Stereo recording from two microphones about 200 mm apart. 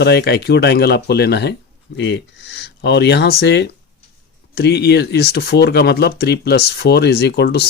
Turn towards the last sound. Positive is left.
turn(degrees=55)  # may be behind; listen again after turning